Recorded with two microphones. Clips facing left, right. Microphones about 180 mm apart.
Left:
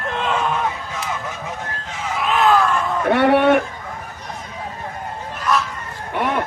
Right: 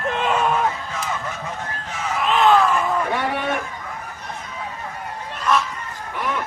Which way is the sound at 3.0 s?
65° left (ahead or behind).